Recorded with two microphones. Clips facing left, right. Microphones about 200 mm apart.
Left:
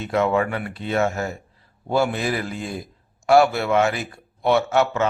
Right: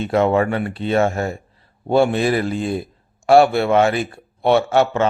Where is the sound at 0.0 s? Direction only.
30° right (ahead or behind).